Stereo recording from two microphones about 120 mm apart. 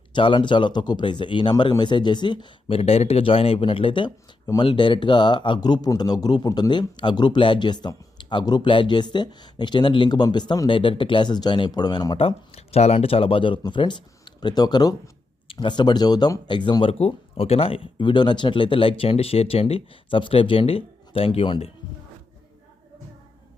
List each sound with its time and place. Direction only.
0.1 s a man's voice: 40° left (ahead or behind)
12.1 s speech: 55° left (ahead or behind)